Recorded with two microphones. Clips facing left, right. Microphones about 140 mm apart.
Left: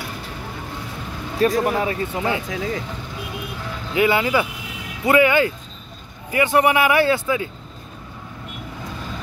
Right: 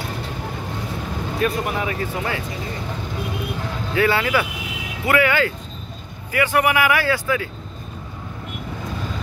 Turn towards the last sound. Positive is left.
turn(degrees=25)  # may be behind; listen again after turning